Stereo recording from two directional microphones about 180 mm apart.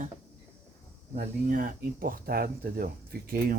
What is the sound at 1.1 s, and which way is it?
Speech, 55° right (ahead or behind).